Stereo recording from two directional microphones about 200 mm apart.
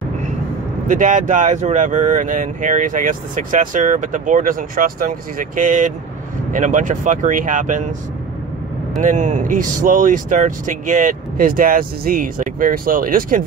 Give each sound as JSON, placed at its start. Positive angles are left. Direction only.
{"t": 0.8, "sound": "speech", "side_deg": -40}
{"t": 8.9, "sound": "speech", "side_deg": -40}